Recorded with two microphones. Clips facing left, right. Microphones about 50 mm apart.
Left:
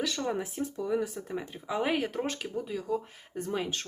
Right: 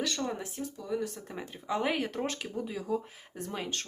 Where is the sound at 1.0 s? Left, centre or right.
Centre.